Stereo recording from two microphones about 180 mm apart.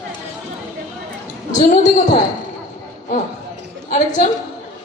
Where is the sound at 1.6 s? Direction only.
45° left (ahead or behind).